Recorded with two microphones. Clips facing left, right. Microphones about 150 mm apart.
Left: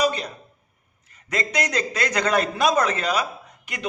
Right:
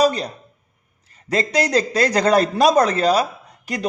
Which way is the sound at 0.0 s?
35° right (ahead or behind).